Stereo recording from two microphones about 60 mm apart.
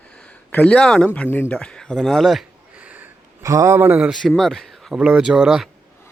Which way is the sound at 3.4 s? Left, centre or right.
Right.